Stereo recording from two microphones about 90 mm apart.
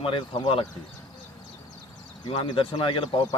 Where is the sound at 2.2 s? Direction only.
65° left (ahead or behind).